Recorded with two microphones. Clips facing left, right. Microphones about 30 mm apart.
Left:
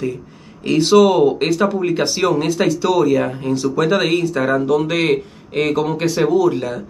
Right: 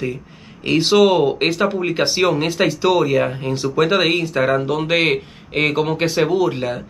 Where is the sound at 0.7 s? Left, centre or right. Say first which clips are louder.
Left 2 dB; right.